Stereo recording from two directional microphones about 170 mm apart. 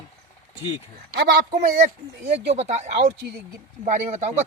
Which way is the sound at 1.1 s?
65° right (ahead or behind).